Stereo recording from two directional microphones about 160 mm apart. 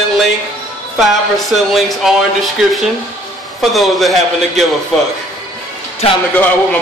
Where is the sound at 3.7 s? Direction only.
Centre (ahead or behind).